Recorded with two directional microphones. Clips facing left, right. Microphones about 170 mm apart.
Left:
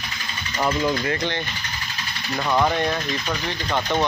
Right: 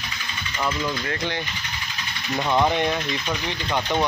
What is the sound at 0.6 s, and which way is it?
Speech, 25° left (ahead or behind).